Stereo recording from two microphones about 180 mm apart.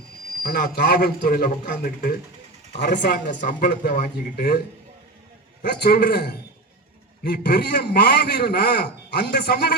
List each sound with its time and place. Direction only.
0.4 s a man's voice: 60° left (ahead or behind)
2.7 s a man's voice: 70° left (ahead or behind)
3.4 s a man's voice: 60° left (ahead or behind)
5.6 s a man's voice: 65° left (ahead or behind)